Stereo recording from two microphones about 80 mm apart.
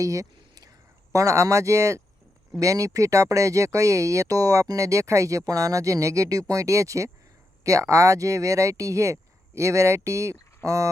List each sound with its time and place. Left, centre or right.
0.0 s whispering: right
1.1 s speech: right